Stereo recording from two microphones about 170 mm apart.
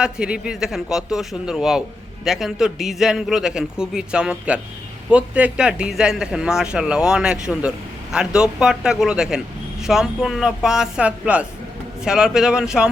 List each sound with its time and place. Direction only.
0.0 s a man's voice: 5° right (ahead or behind)